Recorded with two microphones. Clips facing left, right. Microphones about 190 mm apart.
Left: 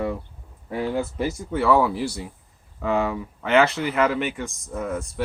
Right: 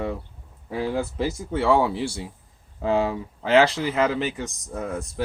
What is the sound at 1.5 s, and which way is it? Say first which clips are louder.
Speech: left 1 dB; 25° right (ahead or behind).